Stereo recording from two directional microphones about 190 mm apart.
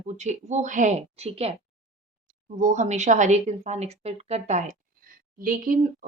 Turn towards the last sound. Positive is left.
turn(degrees=-45)  # may be behind; listen again after turning